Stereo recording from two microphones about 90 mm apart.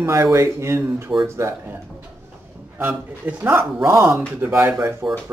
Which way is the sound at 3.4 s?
30° right (ahead or behind).